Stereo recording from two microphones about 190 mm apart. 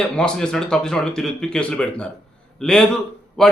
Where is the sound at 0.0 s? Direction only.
5° left (ahead or behind).